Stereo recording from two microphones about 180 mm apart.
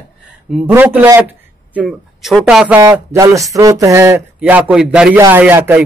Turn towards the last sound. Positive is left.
turn(degrees=-10)  # may be behind; listen again after turning